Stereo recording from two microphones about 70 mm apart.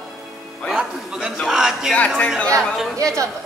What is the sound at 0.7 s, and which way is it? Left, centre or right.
A man's voice, centre.